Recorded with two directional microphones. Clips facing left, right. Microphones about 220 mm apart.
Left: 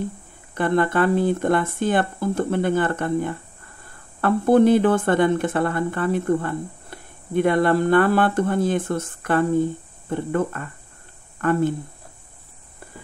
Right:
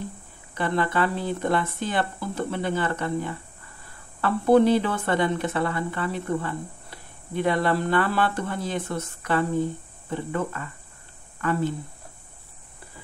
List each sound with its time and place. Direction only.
0.6 s speech: 50° left (ahead or behind)